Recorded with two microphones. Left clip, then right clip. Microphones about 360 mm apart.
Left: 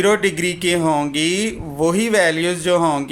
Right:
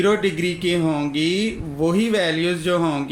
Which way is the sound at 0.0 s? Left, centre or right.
Centre.